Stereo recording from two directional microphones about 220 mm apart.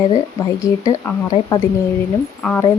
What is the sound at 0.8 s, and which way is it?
Speech, 15° left (ahead or behind).